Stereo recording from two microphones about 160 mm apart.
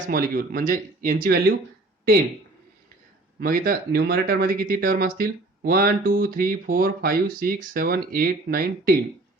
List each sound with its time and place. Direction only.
0.1 s speech: 65° right (ahead or behind)
3.4 s speech: 65° right (ahead or behind)